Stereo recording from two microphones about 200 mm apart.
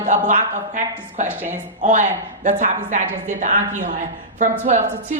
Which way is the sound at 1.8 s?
40° right (ahead or behind).